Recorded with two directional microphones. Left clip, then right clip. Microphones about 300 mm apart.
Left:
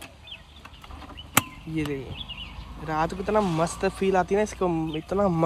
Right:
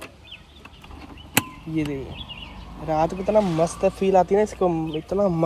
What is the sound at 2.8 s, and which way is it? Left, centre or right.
Speech, centre.